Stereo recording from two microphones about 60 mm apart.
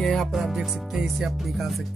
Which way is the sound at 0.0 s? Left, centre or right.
Centre.